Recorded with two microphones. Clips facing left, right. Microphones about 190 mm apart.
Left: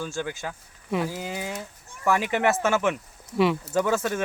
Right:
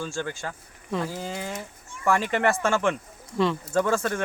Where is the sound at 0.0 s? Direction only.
5° left (ahead or behind).